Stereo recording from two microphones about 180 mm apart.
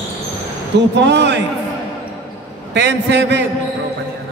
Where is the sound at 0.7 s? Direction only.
75° right (ahead or behind).